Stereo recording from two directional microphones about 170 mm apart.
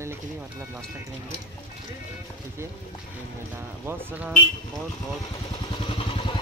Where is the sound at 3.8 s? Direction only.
10° right (ahead or behind).